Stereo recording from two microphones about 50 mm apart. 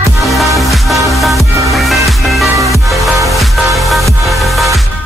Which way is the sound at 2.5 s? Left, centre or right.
Right.